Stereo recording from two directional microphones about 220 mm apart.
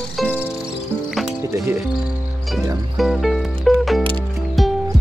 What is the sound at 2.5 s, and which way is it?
Music, centre (ahead or behind).